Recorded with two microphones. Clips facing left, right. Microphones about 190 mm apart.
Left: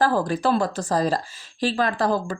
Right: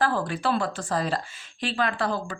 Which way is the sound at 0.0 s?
40° left (ahead or behind).